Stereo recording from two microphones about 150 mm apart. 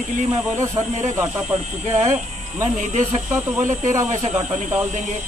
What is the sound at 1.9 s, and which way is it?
Speech, 50° right (ahead or behind).